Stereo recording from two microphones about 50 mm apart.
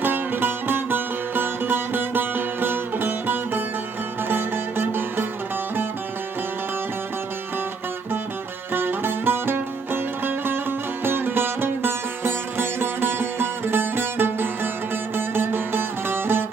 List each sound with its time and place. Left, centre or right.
0.0 s music: right
8.7 s music: right